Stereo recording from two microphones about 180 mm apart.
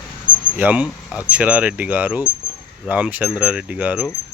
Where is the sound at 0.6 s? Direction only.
5° right (ahead or behind).